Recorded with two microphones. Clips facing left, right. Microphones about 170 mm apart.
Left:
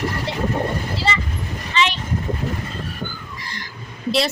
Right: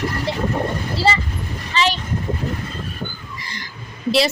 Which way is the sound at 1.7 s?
35° right (ahead or behind).